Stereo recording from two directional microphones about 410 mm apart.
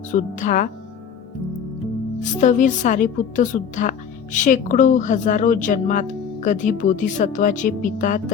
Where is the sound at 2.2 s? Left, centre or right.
Centre.